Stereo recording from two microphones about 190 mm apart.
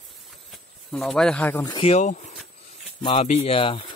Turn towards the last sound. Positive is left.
turn(degrees=30)  # may be behind; listen again after turning